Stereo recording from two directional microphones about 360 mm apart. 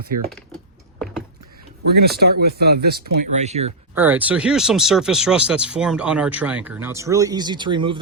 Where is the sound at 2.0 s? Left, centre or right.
Right.